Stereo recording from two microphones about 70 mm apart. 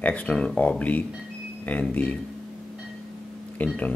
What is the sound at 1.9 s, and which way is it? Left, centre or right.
Speech, left.